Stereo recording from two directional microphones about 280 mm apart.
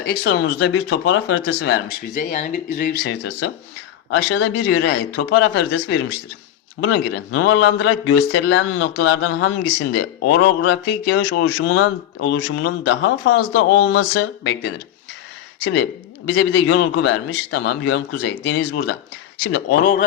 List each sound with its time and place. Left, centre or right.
0.0 s a man's voice: left
6.8 s a man's voice: left
16.3 s a man's voice: left